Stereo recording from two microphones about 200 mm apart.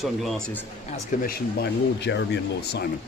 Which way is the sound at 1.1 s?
40° left (ahead or behind).